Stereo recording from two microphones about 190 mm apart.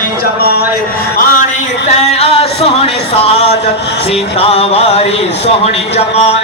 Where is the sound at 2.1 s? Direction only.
30° left (ahead or behind).